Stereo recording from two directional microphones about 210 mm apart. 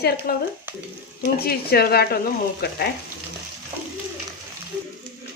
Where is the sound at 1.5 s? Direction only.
45° left (ahead or behind).